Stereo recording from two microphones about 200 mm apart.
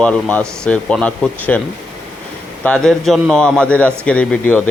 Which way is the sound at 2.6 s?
5° left (ahead or behind).